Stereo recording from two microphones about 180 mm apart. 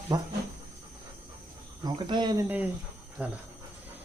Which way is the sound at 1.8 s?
25° right (ahead or behind).